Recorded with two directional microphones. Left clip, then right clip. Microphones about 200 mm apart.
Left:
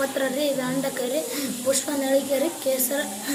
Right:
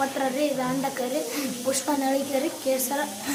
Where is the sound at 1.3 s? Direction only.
25° right (ahead or behind).